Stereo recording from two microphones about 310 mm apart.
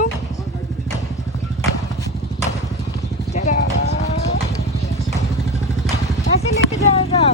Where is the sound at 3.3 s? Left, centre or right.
Left.